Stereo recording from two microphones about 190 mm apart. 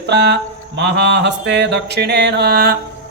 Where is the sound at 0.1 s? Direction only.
60° right (ahead or behind).